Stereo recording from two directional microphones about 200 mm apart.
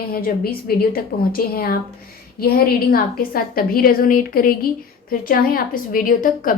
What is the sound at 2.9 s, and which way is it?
A woman's voice, 50° left (ahead or behind).